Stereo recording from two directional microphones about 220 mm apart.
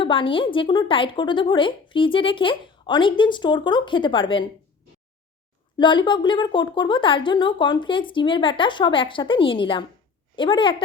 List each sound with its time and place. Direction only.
0.0 s a woman's voice: 25° left (ahead or behind)
5.7 s a woman's voice: 20° left (ahead or behind)